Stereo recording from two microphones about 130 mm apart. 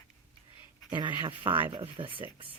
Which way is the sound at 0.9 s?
35° right (ahead or behind).